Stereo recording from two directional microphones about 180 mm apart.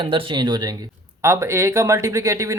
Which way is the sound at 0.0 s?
25° right (ahead or behind).